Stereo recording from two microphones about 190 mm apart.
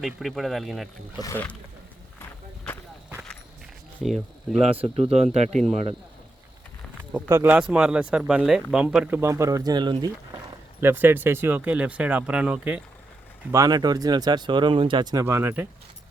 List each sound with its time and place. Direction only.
0.0 s speech: centre (ahead or behind)
1.2 s speech: 10° left (ahead or behind)
4.0 s speech: centre (ahead or behind)
4.7 s speech: 30° right (ahead or behind)
7.1 s speech: 10° right (ahead or behind)
10.8 s speech: 10° right (ahead or behind)
13.5 s speech: 20° right (ahead or behind)